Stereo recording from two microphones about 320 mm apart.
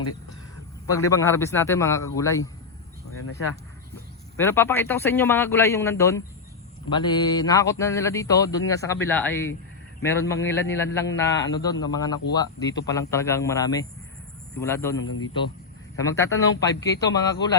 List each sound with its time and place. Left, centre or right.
1.1 s a man's voice: centre
3.2 s a man's voice: left
4.4 s a man's voice: centre
14.9 s a man's voice: left
16.0 s a man's voice: centre